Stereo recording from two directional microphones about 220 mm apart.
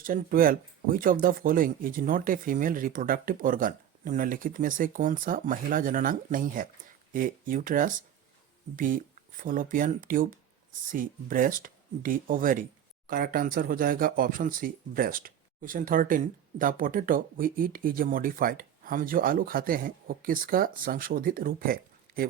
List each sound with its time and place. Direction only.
0.0 s speech: 40° right (ahead or behind)